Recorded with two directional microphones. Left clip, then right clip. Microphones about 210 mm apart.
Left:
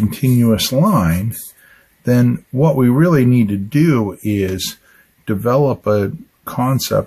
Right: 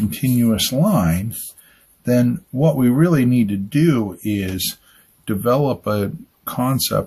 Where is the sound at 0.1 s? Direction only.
35° left (ahead or behind).